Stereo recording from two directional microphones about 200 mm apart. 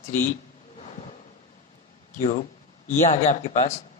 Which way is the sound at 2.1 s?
40° left (ahead or behind).